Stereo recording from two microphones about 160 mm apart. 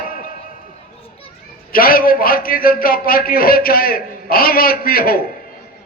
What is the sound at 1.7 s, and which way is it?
A man's voice, 65° left (ahead or behind).